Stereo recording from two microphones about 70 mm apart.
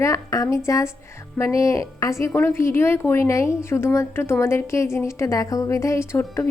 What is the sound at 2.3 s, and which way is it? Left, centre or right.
A woman's voice, left.